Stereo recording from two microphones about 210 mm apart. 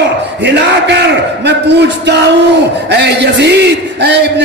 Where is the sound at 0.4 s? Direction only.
55° right (ahead or behind).